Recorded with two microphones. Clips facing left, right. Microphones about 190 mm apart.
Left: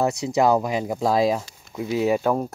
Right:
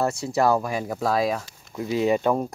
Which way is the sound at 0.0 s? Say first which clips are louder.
Left 2 dB; 15° left (ahead or behind).